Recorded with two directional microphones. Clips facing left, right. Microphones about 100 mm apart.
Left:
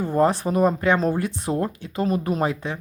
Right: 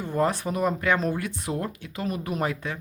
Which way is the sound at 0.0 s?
35° left (ahead or behind).